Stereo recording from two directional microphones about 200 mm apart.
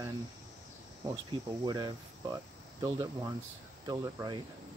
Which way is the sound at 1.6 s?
20° right (ahead or behind).